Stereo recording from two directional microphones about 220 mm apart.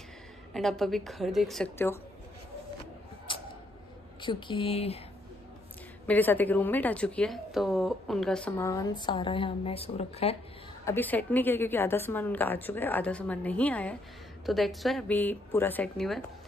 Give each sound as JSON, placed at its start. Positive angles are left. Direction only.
{"t": 0.5, "sound": "a woman's voice", "side_deg": 0}
{"t": 4.2, "sound": "speech", "side_deg": 20}
{"t": 6.0, "sound": "a woman's voice", "side_deg": 10}
{"t": 10.9, "sound": "a woman's voice", "side_deg": 10}